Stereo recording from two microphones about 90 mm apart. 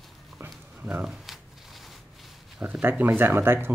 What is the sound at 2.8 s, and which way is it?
Speech, 25° right (ahead or behind).